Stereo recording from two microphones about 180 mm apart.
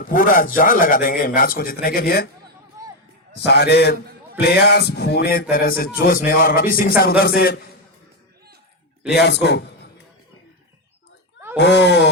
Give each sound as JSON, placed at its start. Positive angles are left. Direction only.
{"t": 0.0, "sound": "a man's voice", "side_deg": 50}
{"t": 3.4, "sound": "a man's voice", "side_deg": 65}
{"t": 9.0, "sound": "a man's voice", "side_deg": 70}
{"t": 11.5, "sound": "a man's voice", "side_deg": 75}